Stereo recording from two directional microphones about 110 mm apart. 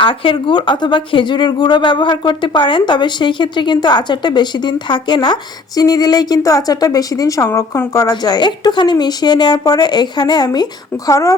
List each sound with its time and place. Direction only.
0.0 s speech: 50° left (ahead or behind); by 8.1 s 30° left (ahead or behind)
8.1 s speech: 40° left (ahead or behind)